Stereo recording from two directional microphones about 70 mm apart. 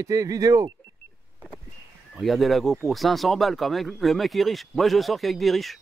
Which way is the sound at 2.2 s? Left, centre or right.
Centre.